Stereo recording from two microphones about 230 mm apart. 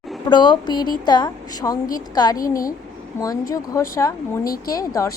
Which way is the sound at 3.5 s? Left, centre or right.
Centre.